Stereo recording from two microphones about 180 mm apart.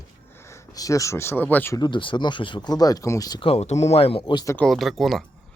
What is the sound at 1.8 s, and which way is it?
Speech, 25° left (ahead or behind).